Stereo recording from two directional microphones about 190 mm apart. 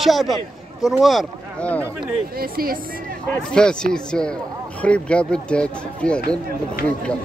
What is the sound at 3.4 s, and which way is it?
Speech, 5° left (ahead or behind).